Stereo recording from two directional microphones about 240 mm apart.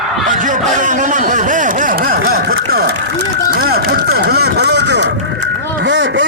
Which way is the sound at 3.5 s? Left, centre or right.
Right.